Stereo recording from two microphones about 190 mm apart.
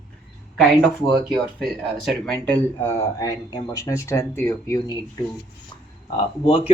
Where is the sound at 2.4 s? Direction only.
10° left (ahead or behind).